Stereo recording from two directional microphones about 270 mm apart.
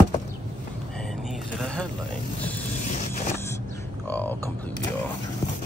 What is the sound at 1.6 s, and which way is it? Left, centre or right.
Speech, centre.